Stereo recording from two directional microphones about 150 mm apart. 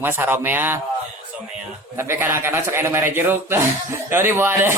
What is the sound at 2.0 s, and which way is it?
Speech, 15° right (ahead or behind).